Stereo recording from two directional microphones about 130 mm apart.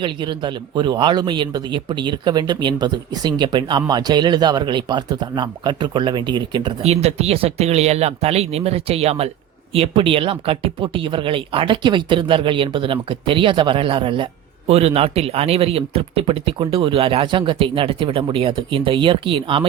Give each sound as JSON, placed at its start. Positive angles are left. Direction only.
{"t": 0.0, "sound": "speech", "side_deg": -35}
{"t": 6.8, "sound": "speech", "side_deg": -55}
{"t": 14.7, "sound": "speech", "side_deg": -50}